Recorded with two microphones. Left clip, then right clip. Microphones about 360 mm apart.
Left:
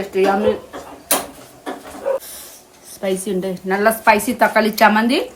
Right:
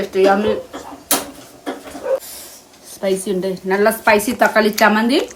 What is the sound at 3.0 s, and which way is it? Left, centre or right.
A woman's voice, centre.